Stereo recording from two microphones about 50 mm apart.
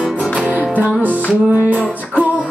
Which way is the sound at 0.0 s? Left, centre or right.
Centre.